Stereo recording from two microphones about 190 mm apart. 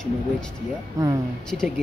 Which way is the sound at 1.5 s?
5° left (ahead or behind).